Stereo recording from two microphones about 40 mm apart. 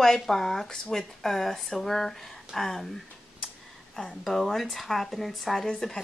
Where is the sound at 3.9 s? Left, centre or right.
Centre.